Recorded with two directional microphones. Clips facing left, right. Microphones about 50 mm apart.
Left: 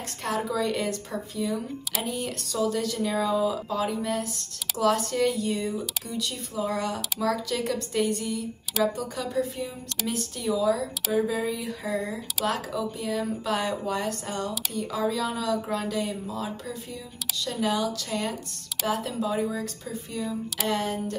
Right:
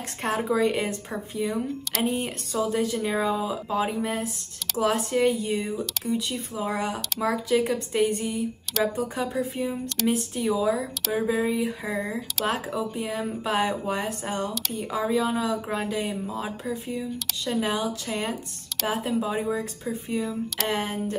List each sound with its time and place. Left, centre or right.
0.2 s speech: right